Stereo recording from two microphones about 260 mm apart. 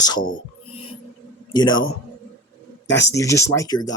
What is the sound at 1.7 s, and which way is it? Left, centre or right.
Speech, left.